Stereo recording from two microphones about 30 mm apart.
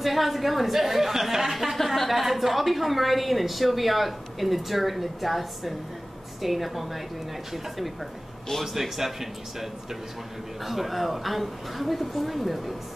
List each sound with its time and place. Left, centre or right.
0.0 s a woman's voice: centre